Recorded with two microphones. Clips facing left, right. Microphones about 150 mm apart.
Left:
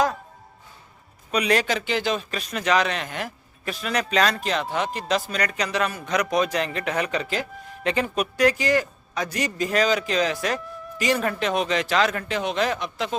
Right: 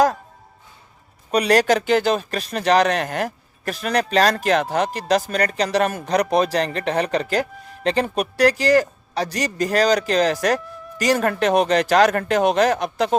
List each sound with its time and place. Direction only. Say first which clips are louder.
1.3 s speech: right 6 dB; 40° right (ahead or behind)